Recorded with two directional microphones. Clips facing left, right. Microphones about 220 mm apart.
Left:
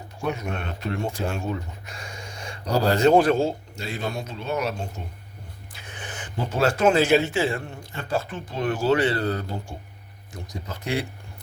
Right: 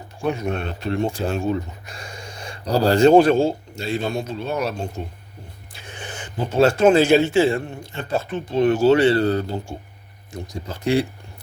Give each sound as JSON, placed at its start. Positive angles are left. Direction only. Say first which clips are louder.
{"t": 0.2, "sound": "speech", "louder": "right 5 dB", "side_deg": -30}
{"t": 5.7, "sound": "speech", "louder": "right 3 dB", "side_deg": -30}